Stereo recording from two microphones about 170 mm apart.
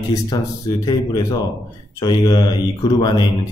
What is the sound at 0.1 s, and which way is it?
Speech, 25° left (ahead or behind).